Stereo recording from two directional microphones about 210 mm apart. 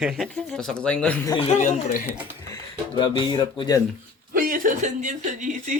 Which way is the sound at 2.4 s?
20° left (ahead or behind).